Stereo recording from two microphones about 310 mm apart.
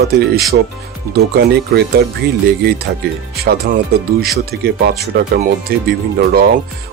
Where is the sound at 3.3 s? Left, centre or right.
Right.